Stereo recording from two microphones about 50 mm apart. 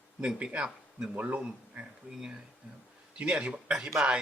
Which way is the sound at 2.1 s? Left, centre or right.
Centre.